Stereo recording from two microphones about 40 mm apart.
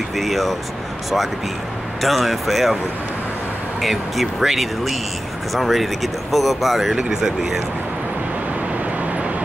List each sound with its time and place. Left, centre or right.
0.1 s speech: centre
2.0 s speech: centre
3.8 s speech: centre
7.0 s speech: centre